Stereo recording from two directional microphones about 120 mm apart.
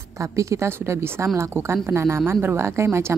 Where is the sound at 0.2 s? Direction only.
25° right (ahead or behind).